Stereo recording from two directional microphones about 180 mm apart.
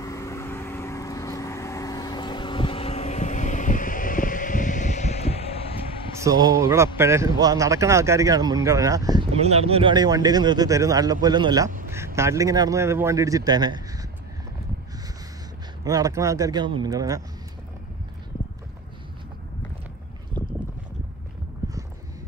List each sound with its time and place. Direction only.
0.0 s vehicle: 20° left (ahead or behind); by 5.3 s 40° left (ahead or behind)
6.1 s a man's voice: 20° right (ahead or behind)
9.4 s a man's voice: 35° right (ahead or behind)
15.8 s speech: 20° right (ahead or behind)